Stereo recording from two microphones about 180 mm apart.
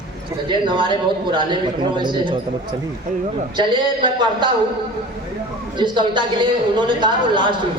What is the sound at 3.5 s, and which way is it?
Speech, 25° right (ahead or behind).